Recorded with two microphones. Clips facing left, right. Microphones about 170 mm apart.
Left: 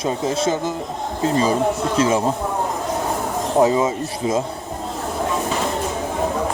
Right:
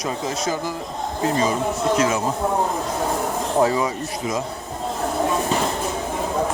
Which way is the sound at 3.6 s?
20° left (ahead or behind).